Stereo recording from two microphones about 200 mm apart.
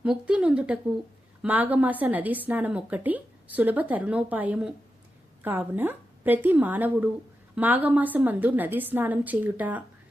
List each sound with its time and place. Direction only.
0.0 s a woman's voice: 5° right (ahead or behind)